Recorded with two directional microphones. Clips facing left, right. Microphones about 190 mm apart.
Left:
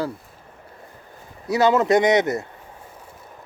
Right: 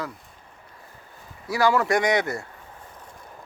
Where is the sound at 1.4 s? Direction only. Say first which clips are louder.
Left 4 dB; 20° left (ahead or behind).